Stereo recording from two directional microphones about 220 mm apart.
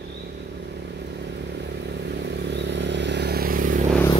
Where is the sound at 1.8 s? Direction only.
50° right (ahead or behind).